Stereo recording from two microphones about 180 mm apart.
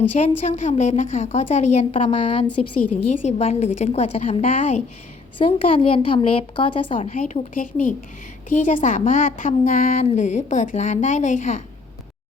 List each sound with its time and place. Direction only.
0.2 s a woman's voice: 40° left (ahead or behind)
7.2 s speech: 45° left (ahead or behind)